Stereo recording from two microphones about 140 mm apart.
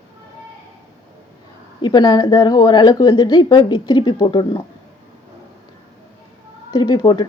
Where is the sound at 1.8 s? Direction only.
30° left (ahead or behind).